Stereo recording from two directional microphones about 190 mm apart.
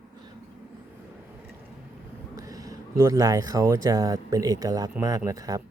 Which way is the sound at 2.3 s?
20° right (ahead or behind).